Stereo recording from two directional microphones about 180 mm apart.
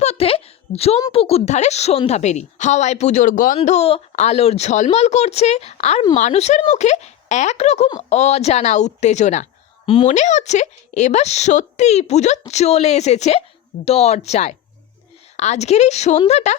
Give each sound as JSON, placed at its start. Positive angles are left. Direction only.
{"t": 0.0, "sound": "a sound", "side_deg": 35}
{"t": 1.1, "sound": "a woman's voice", "side_deg": 35}
{"t": 3.6, "sound": "a woman's voice", "side_deg": 35}